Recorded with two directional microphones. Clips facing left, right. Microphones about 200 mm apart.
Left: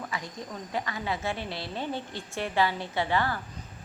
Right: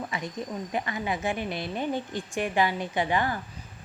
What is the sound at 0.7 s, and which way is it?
A woman's voice, 20° right (ahead or behind).